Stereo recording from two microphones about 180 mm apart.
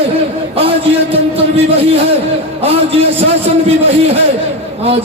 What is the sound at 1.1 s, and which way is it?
Speech, 35° right (ahead or behind).